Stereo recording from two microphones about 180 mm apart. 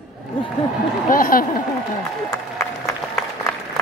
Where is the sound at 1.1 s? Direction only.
50° left (ahead or behind).